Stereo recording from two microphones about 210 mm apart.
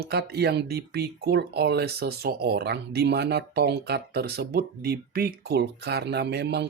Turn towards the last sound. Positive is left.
turn(degrees=-55)  # may be behind; listen again after turning